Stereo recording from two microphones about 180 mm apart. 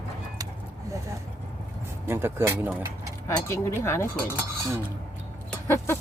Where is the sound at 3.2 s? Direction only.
15° left (ahead or behind).